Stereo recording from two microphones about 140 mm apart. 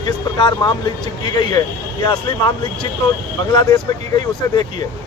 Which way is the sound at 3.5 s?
30° left (ahead or behind).